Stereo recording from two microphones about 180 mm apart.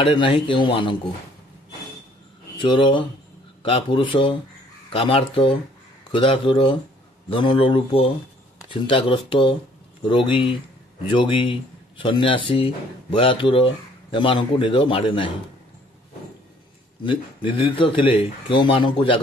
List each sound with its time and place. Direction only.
0.0 s speech: 30° left (ahead or behind)
2.6 s speech: 25° left (ahead or behind)
17.0 s speech: 30° left (ahead or behind)